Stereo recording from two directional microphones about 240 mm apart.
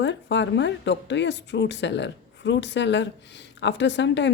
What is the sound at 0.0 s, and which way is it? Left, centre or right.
Speech, left.